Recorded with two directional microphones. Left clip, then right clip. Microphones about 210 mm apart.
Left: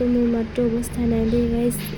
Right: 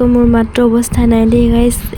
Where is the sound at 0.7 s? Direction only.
90° right.